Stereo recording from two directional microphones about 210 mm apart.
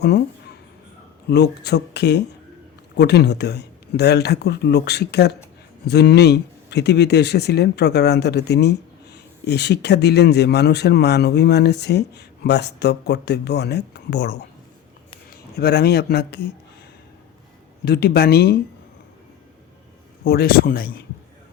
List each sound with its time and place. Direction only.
1.3 s speech: 50° left (ahead or behind)
17.8 s speech: 50° left (ahead or behind)
20.2 s speech: 45° left (ahead or behind)